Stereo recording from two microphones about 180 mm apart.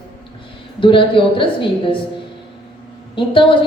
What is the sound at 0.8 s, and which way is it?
Speech, 30° left (ahead or behind).